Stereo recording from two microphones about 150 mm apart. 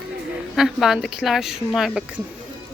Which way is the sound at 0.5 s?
Centre (ahead or behind).